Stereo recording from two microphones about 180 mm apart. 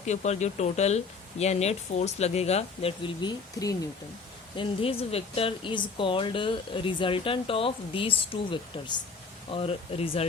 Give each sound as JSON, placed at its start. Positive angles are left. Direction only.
{"t": 0.0, "sound": "speech", "side_deg": 40}